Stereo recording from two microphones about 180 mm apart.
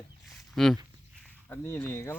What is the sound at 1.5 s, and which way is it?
Speech, 10° left (ahead or behind).